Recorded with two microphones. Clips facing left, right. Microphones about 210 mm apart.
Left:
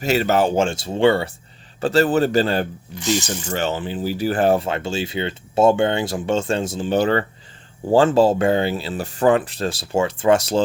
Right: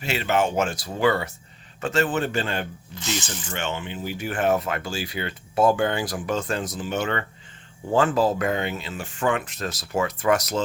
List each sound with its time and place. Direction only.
0.0 s speech: 40° left (ahead or behind)